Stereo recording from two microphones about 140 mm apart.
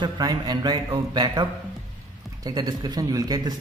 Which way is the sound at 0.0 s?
25° right (ahead or behind).